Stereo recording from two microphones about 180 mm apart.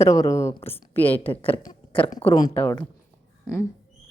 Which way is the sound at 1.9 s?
30° left (ahead or behind).